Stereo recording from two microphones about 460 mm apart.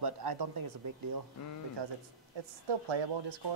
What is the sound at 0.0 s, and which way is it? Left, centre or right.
Speech, right.